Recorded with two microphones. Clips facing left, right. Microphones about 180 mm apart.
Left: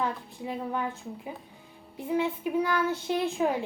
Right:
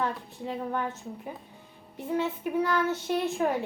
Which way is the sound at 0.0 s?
10° left (ahead or behind).